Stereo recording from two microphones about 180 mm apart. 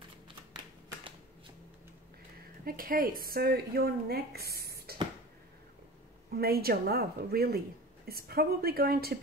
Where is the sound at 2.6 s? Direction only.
55° right (ahead or behind).